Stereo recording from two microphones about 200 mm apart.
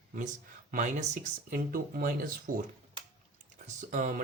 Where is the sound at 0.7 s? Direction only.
40° right (ahead or behind).